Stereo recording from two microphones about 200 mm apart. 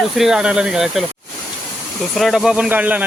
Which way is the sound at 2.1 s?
Centre (ahead or behind).